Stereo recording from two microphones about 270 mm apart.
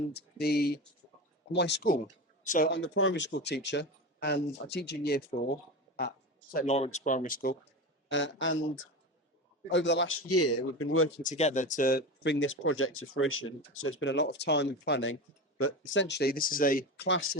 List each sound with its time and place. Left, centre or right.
0.1 s speech: left
6.5 s speech: left
8.1 s speech: left
11.2 s speech: left